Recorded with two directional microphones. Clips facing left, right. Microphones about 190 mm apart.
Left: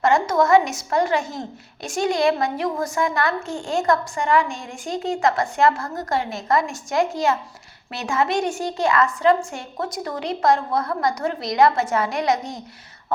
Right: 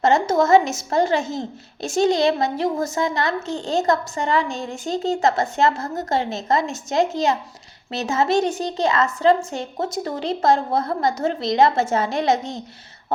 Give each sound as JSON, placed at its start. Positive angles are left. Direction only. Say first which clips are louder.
{"t": 0.0, "sound": "a woman's voice", "louder": "right 1 dB", "side_deg": -25}